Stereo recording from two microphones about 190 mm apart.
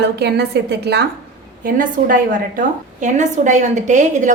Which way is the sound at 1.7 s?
45° right (ahead or behind).